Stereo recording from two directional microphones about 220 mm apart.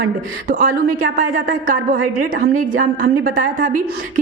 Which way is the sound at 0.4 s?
40° right (ahead or behind).